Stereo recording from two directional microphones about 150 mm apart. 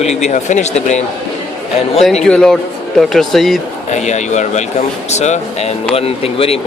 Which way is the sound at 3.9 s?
50° left (ahead or behind).